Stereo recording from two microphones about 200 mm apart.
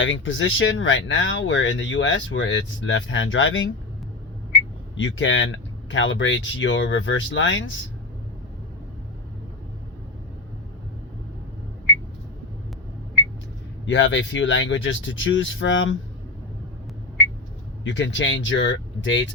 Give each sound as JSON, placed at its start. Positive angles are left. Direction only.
{"t": 0.0, "sound": "speech", "side_deg": 70}
{"t": 4.9, "sound": "speech", "side_deg": 70}
{"t": 13.8, "sound": "speech", "side_deg": 65}
{"t": 17.8, "sound": "speech", "side_deg": 65}